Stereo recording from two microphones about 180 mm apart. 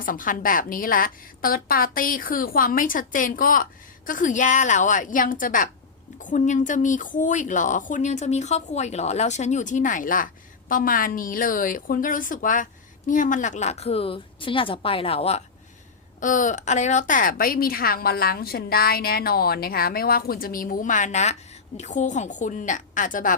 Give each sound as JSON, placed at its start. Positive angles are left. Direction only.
{"t": 0.0, "sound": "a woman's voice", "side_deg": 50}
{"t": 16.2, "sound": "a woman's voice", "side_deg": 45}